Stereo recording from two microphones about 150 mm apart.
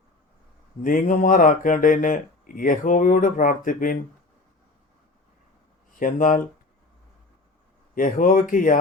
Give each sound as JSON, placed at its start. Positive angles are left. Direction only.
{"t": 0.8, "sound": "speech", "side_deg": 60}
{"t": 6.0, "sound": "speech", "side_deg": 65}
{"t": 7.9, "sound": "speech", "side_deg": 65}